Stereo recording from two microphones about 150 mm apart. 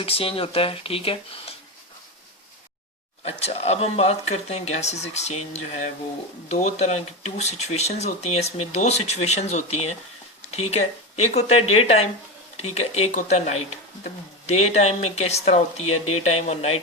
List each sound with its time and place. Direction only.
0.0 s speech: 40° left (ahead or behind)
3.2 s speech: 45° left (ahead or behind)
6.5 s speech: 50° left (ahead or behind)